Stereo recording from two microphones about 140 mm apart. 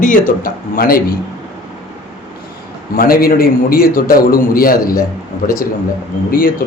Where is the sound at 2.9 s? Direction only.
90° left.